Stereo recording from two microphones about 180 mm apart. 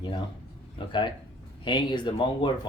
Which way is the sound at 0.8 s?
25° left (ahead or behind).